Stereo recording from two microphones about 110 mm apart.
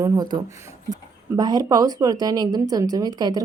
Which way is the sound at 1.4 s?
35° right (ahead or behind).